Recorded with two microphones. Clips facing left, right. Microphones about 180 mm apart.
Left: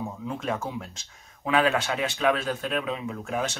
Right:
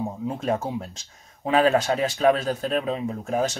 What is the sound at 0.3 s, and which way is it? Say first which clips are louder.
Speech: right 4 dB; 35° right (ahead or behind).